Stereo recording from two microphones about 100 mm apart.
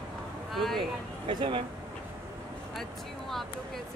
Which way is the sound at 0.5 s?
Centre (ahead or behind).